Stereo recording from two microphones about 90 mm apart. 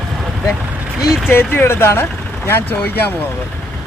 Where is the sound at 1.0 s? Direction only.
5° right (ahead or behind).